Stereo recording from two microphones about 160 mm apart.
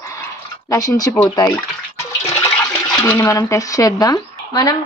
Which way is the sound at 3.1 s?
20° left (ahead or behind).